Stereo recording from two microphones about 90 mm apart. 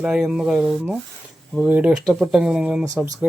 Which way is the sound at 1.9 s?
5° right (ahead or behind).